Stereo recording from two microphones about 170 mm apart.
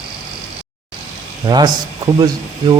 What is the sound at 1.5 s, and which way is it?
Speech, 25° right (ahead or behind).